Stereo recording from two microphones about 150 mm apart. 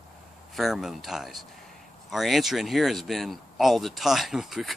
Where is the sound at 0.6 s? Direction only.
Centre (ahead or behind).